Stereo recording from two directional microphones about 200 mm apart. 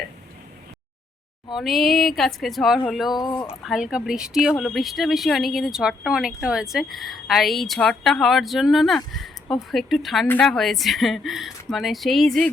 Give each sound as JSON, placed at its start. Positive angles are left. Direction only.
{"t": 1.5, "sound": "speech", "side_deg": 0}
{"t": 3.2, "sound": "speech", "side_deg": 20}
{"t": 3.6, "sound": "speech", "side_deg": 0}